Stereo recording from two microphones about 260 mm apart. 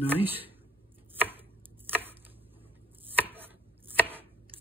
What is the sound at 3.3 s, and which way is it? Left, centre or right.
Chopping, centre.